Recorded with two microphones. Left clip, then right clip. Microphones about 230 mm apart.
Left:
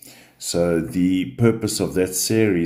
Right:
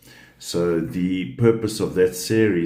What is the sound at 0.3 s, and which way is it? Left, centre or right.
Speech, left.